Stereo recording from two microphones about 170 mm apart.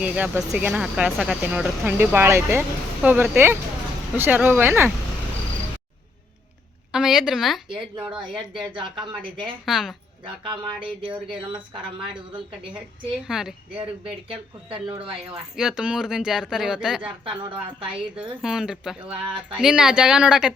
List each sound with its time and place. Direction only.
0.0 s speech: 5° right (ahead or behind)
6.9 s a woman's voice: 5° right (ahead or behind)
8.7 s speech: 30° right (ahead or behind)
9.6 s speech: centre (ahead or behind)
10.2 s speech: 30° right (ahead or behind)
13.2 s speech: 5° right (ahead or behind)
14.3 s speech: 30° right (ahead or behind)
15.5 s speech: 5° right (ahead or behind)
17.0 s speech: 30° right (ahead or behind)
18.4 s speech: 5° right (ahead or behind)